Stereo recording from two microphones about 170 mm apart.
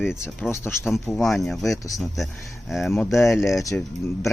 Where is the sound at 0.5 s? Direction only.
15° left (ahead or behind).